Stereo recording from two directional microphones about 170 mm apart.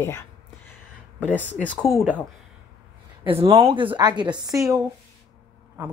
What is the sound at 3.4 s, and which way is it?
A woman's voice, 35° right (ahead or behind).